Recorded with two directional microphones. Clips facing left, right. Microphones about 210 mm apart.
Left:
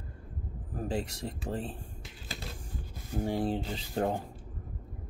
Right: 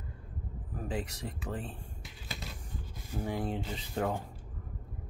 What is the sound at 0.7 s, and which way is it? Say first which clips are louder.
Speech: left 3 dB; 30° left (ahead or behind).